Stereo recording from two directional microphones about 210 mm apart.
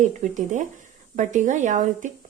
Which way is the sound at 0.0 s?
35° right (ahead or behind).